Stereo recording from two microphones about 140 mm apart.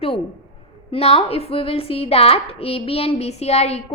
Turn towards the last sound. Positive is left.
turn(degrees=50)  # may be behind; listen again after turning